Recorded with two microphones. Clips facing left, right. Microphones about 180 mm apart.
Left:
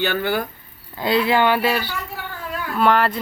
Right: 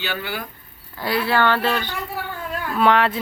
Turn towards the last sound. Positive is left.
turn(degrees=0)  # may be behind; listen again after turning